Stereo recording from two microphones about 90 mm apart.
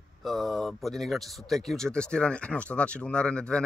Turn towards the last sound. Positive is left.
turn(degrees=10)  # may be behind; listen again after turning